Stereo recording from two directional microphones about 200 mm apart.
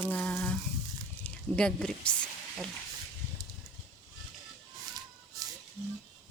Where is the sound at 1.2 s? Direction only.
5° left (ahead or behind).